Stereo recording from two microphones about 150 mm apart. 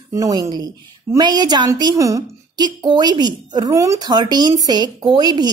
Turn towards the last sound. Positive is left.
turn(degrees=-30)  # may be behind; listen again after turning